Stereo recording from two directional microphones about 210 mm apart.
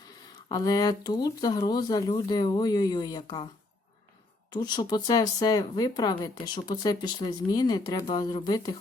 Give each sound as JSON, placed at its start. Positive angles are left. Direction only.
{"t": 0.4, "sound": "speech", "side_deg": 20}
{"t": 4.5, "sound": "speech", "side_deg": 20}